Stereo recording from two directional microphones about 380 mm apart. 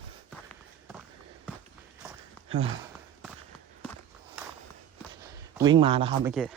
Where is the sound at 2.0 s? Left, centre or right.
Centre.